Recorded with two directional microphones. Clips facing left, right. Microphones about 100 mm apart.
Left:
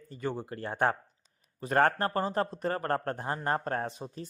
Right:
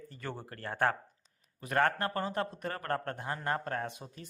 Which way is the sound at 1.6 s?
30° left (ahead or behind).